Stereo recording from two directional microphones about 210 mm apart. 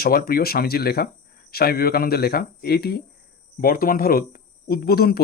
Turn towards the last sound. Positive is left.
turn(degrees=45)  # may be behind; listen again after turning